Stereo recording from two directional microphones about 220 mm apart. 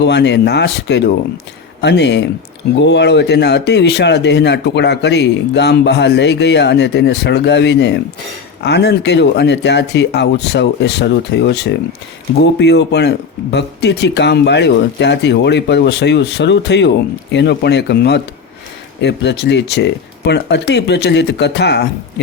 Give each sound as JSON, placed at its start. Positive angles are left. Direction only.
{"t": 0.0, "sound": "speech", "side_deg": 50}